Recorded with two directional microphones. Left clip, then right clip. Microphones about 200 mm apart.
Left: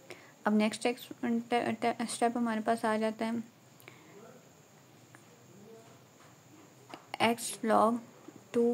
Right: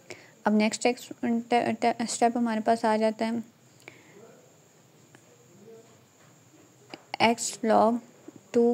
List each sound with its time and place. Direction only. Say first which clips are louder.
0.1 s a woman's voice: right 5 dB; 20° right (ahead or behind)
6.9 s speech: right 6 dB; 20° right (ahead or behind)